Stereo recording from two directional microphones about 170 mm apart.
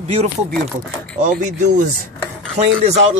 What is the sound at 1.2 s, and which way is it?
Speech, 45° right (ahead or behind).